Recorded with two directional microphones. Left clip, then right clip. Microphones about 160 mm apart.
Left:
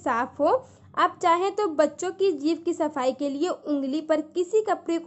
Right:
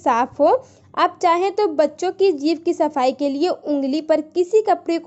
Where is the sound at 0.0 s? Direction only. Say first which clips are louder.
Right 8 dB; 25° right (ahead or behind).